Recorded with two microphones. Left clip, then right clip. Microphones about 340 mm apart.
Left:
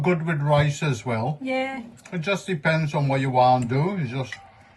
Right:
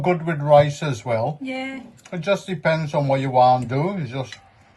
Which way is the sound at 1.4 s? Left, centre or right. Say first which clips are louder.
Left 3 dB; centre.